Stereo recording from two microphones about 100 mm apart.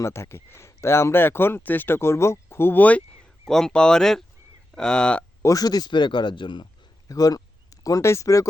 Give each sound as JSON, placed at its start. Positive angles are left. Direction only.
{"t": 0.0, "sound": "speech", "side_deg": 25}
{"t": 5.4, "sound": "a man's voice", "side_deg": 35}
{"t": 7.1, "sound": "speech", "side_deg": 40}